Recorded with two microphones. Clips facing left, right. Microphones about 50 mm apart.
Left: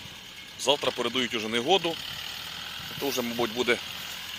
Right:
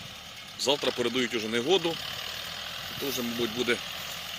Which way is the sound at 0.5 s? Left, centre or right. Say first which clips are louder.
Left 2 dB; left.